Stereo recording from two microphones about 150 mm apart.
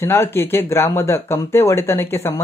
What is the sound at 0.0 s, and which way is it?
Speech, 15° left (ahead or behind).